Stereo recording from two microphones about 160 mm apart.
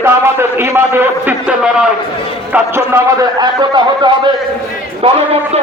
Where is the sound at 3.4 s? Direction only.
30° right (ahead or behind).